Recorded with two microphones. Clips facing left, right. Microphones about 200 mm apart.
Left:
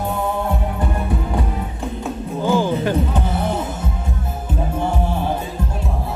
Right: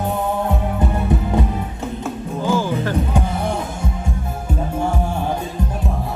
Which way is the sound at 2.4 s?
15° left (ahead or behind).